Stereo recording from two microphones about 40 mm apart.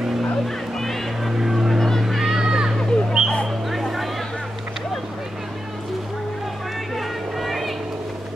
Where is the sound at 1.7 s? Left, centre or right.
Centre.